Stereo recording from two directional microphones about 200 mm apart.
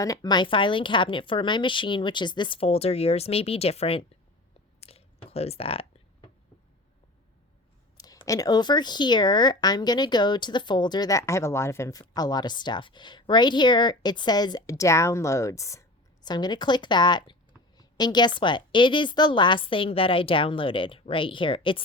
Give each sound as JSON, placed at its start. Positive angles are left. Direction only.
{"t": 0.0, "sound": "speech", "side_deg": 20}
{"t": 4.8, "sound": "squish", "side_deg": 30}
{"t": 7.9, "sound": "speech", "side_deg": 20}